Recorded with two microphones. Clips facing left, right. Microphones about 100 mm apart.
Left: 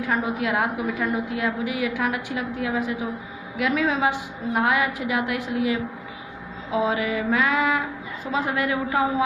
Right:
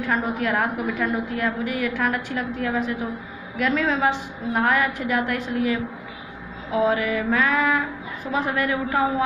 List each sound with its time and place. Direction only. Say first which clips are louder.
0.0 s a woman's voice: right 1 dB; 15° left (ahead or behind)
6.7 s mantra: right 2 dB; 25° left (ahead or behind)